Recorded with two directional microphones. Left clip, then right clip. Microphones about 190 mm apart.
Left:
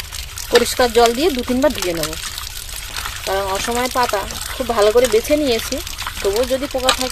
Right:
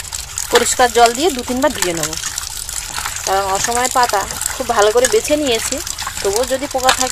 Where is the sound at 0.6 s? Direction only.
5° left (ahead or behind).